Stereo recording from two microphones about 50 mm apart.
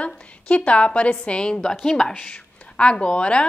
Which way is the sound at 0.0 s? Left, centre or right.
Left.